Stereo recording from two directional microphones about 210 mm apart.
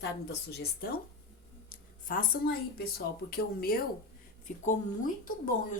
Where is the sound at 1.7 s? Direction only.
40° left (ahead or behind).